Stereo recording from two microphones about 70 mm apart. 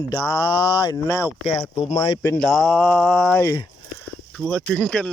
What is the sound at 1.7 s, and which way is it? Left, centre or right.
Speech, left.